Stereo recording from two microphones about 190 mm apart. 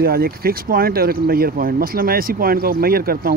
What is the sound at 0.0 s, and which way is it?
Speech, 50° right (ahead or behind).